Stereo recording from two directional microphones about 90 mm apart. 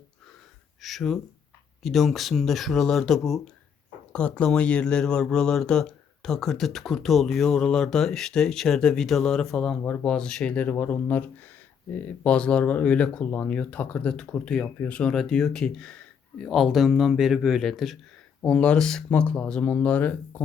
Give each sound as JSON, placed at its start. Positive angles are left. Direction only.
{"t": 0.8, "sound": "speech", "side_deg": 0}
{"t": 4.1, "sound": "speech", "side_deg": 15}
{"t": 15.1, "sound": "speech", "side_deg": 5}